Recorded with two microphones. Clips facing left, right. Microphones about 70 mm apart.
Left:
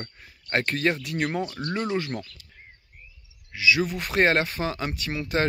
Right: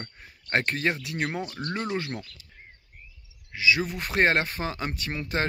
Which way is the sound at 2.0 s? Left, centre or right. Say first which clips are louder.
Left 3 dB; centre.